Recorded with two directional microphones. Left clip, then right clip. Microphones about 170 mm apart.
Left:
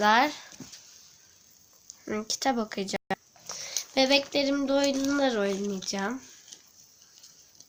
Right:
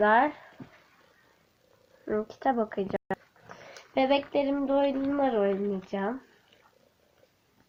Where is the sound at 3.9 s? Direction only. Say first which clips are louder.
Left 1 dB; 35° left (ahead or behind).